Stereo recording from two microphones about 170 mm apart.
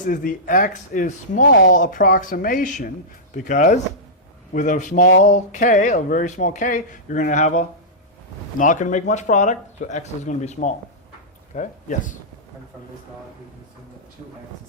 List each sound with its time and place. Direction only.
0.1 s speech: 55° left (ahead or behind)